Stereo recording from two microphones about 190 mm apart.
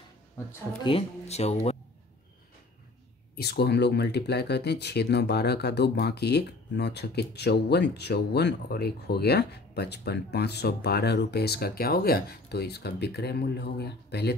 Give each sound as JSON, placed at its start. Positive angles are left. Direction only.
{"t": 0.8, "sound": "speech", "side_deg": 30}
{"t": 3.3, "sound": "speech", "side_deg": 60}